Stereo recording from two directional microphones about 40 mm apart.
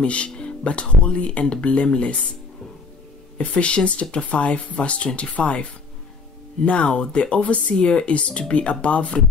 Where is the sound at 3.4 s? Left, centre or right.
Left.